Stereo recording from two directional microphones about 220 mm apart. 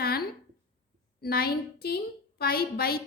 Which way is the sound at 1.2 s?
45° left (ahead or behind).